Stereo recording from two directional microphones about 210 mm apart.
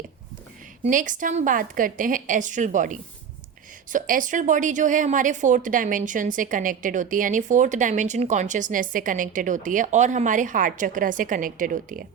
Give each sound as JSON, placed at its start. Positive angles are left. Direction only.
{"t": 0.9, "sound": "speech", "side_deg": -40}